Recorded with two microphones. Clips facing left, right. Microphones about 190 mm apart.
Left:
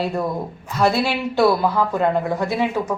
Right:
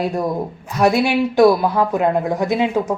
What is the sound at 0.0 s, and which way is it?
A woman's voice, 15° right (ahead or behind).